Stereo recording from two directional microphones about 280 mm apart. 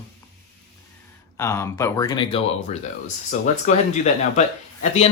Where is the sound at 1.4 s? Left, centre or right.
Centre.